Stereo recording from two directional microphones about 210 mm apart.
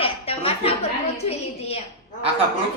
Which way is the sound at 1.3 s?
30° left (ahead or behind).